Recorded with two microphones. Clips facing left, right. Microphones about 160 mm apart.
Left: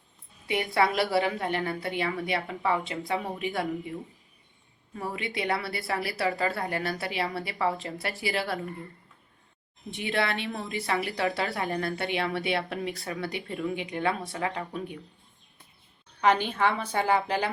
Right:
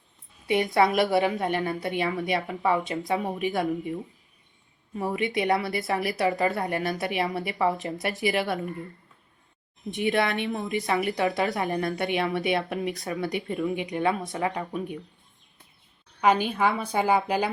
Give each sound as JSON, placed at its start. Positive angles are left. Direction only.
{"t": 0.4, "sound": "a woman's voice", "side_deg": -20}
{"t": 4.9, "sound": "a woman's voice", "side_deg": -20}
{"t": 9.9, "sound": "a woman's voice", "side_deg": -20}
{"t": 16.2, "sound": "a woman's voice", "side_deg": -10}